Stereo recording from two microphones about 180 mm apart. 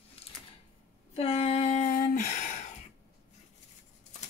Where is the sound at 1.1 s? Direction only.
35° left (ahead or behind).